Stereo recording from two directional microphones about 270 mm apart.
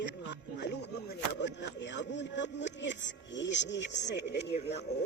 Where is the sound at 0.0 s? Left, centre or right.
Left.